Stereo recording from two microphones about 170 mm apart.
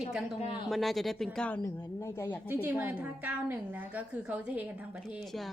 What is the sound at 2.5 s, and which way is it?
A woman's voice, 10° right (ahead or behind).